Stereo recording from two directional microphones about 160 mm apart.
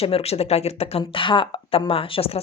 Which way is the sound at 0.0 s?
40° left (ahead or behind).